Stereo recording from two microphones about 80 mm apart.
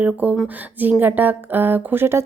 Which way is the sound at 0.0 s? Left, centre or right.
Centre.